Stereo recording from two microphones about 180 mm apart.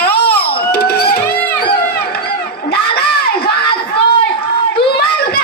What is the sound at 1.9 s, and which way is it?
Crowd, 60° left (ahead or behind).